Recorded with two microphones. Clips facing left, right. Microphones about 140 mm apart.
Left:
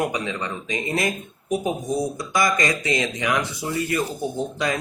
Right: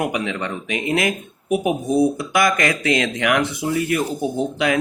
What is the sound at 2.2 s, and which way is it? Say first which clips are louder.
Speech: right 3 dB; 60° right (ahead or behind).